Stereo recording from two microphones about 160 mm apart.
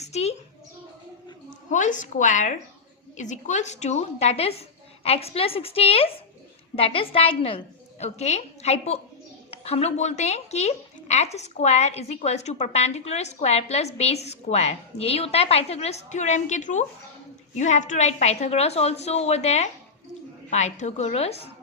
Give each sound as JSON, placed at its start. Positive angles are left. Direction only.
{"t": 0.0, "sound": "a child's voice", "side_deg": 45}
{"t": 1.5, "sound": "a woman's voice", "side_deg": 50}